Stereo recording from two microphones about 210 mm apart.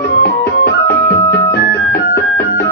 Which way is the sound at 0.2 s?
50° left (ahead or behind).